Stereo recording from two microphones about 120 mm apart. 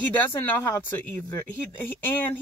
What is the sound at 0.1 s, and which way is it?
Speech, 15° left (ahead or behind).